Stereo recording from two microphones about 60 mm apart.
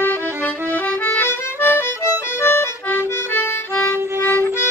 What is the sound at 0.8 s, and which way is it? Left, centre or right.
Accordion, left.